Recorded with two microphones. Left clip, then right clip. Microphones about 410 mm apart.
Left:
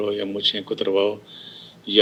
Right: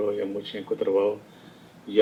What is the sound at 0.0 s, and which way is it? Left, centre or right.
Speech, left.